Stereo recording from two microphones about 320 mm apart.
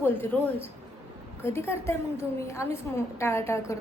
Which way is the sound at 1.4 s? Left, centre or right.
Centre.